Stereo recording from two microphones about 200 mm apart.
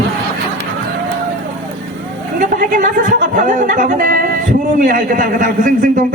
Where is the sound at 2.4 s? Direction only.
40° right (ahead or behind).